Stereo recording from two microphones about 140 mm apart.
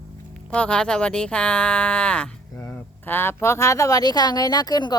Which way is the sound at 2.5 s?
20° left (ahead or behind).